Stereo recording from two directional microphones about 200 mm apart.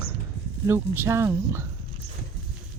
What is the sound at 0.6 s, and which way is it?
Speech, 10° right (ahead or behind).